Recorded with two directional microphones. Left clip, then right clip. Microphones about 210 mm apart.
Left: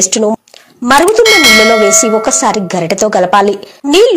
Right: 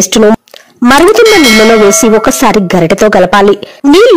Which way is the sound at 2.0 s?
35° right (ahead or behind).